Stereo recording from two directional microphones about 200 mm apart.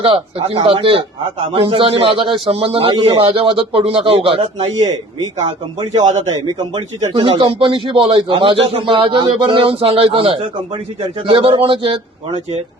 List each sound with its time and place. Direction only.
0.0 s a man's voice: 25° right (ahead or behind)